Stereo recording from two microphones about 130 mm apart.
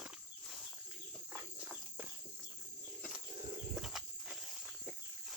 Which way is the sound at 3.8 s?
Centre (ahead or behind).